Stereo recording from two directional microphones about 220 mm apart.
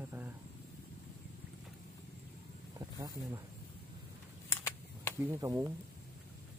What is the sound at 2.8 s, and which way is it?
Speech, 15° right (ahead or behind).